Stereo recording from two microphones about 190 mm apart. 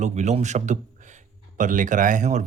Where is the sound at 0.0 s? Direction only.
35° right (ahead or behind).